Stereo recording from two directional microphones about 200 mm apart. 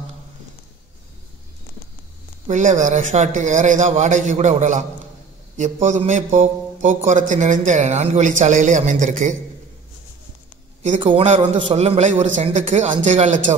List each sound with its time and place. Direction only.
2.4 s a man's voice: 40° right (ahead or behind)
11.0 s a man's voice: 25° right (ahead or behind)